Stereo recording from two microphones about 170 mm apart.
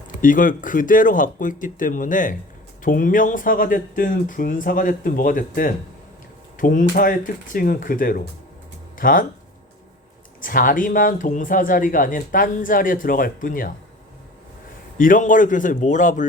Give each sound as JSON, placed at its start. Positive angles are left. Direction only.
{"t": 0.2, "sound": "speech", "side_deg": 50}
{"t": 10.4, "sound": "speech", "side_deg": 55}
{"t": 14.9, "sound": "speech", "side_deg": 50}